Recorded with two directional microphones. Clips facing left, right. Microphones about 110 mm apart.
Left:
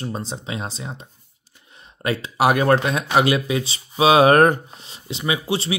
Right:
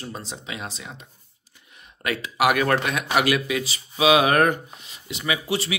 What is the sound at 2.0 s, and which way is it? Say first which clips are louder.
Speech: left 3 dB; 30° left (ahead or behind).